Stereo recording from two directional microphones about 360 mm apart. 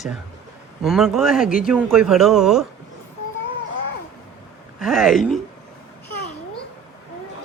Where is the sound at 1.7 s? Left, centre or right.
Centre.